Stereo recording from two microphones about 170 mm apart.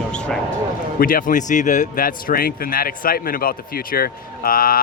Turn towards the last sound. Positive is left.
turn(degrees=55)  # may be behind; listen again after turning